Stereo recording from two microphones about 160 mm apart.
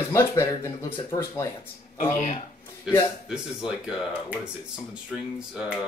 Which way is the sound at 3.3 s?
5° right (ahead or behind).